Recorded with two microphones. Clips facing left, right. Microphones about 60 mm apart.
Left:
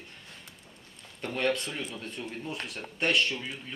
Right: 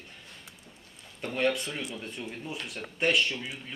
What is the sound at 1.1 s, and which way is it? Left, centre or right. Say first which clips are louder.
Speech: right 1 dB; centre.